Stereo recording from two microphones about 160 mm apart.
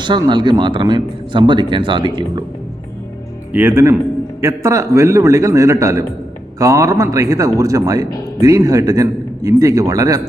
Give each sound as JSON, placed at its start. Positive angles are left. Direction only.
{"t": 0.0, "sound": "speech", "side_deg": -30}
{"t": 3.5, "sound": "speech", "side_deg": -15}